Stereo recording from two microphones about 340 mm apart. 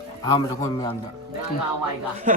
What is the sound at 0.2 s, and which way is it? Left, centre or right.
Speech, centre.